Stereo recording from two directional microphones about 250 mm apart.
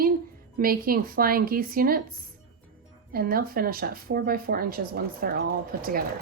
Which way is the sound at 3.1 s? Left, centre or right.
Right.